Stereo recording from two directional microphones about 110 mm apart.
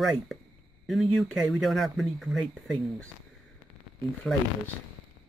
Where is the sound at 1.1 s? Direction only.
Centre (ahead or behind).